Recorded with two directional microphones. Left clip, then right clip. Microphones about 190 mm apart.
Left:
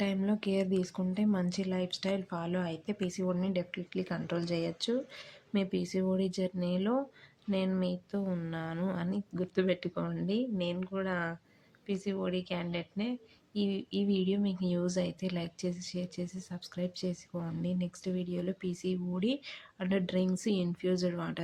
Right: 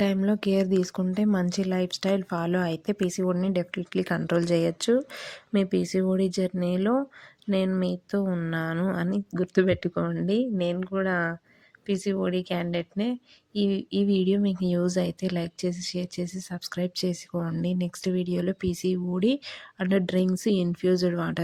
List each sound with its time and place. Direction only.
0.0 s a woman's voice: 40° right (ahead or behind)